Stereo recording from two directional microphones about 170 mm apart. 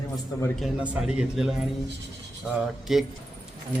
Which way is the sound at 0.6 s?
5° right (ahead or behind).